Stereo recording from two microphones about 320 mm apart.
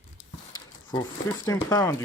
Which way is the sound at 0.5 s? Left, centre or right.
Centre.